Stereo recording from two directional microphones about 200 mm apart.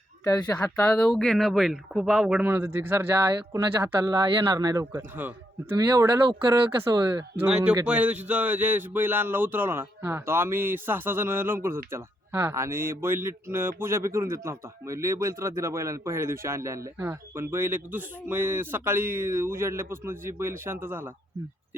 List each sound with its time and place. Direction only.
0.3 s speech: 10° left (ahead or behind); by 5.3 s 10° right (ahead or behind)
6.5 s speech: 20° right (ahead or behind)
7.4 s speech: 5° right (ahead or behind)